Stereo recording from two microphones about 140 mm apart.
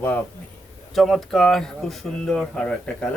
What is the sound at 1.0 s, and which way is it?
Speech, centre (ahead or behind).